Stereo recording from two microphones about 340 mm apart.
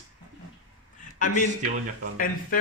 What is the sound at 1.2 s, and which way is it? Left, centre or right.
Speech, left.